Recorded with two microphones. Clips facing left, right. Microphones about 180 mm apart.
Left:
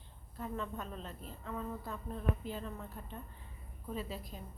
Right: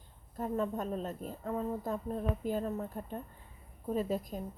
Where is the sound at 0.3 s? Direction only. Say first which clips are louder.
Right 7 dB; 45° right (ahead or behind).